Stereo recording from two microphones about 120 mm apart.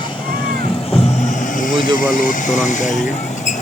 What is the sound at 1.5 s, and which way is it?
Speech, 90° left.